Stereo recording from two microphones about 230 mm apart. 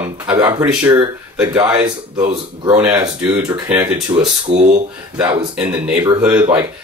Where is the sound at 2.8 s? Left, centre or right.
Centre.